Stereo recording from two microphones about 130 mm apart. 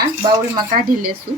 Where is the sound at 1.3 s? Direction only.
85° right.